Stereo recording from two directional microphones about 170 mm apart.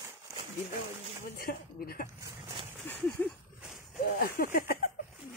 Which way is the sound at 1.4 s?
60° left (ahead or behind).